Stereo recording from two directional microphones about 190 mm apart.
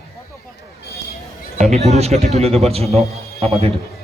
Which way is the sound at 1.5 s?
35° right (ahead or behind).